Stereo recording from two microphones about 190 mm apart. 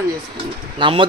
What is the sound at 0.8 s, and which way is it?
Speech, 25° right (ahead or behind).